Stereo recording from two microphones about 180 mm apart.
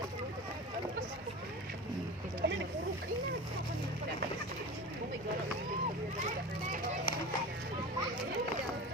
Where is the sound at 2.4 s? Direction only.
70° right (ahead or behind).